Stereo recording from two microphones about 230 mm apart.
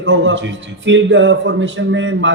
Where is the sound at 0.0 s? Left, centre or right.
Right.